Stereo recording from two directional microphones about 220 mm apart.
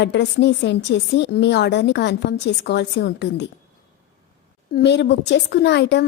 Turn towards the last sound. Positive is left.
turn(degrees=50)  # may be behind; listen again after turning